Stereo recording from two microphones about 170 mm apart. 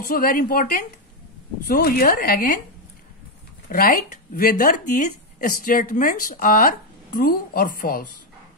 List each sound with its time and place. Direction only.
0.0 s speech: 55° left (ahead or behind)
3.6 s speech: 55° left (ahead or behind)